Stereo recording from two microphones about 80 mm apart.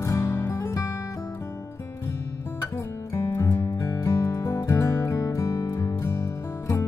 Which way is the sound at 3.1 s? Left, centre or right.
Left.